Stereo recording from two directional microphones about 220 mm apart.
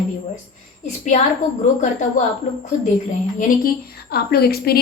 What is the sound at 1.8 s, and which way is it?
Speech, 35° left (ahead or behind).